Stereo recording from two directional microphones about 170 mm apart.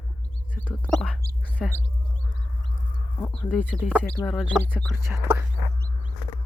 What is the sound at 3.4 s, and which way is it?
Speech, 5° left (ahead or behind).